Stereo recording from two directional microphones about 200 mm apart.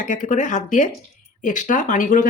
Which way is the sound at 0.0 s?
40° left (ahead or behind).